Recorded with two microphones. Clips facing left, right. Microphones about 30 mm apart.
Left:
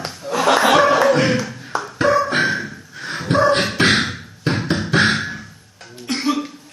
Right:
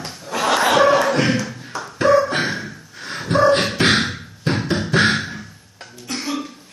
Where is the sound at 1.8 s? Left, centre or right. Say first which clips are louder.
Right 2 dB; centre.